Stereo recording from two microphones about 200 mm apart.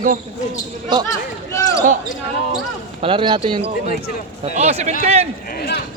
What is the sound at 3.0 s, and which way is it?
A man's voice, 25° right (ahead or behind).